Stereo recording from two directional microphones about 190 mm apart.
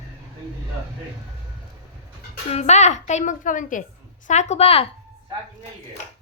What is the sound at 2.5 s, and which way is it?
A woman's voice, 35° left (ahead or behind).